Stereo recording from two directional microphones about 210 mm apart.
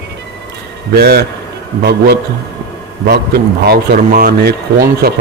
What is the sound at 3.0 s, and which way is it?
Speech, 50° right (ahead or behind).